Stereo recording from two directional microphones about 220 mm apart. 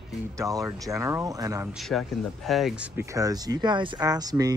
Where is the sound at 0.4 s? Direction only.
15° right (ahead or behind).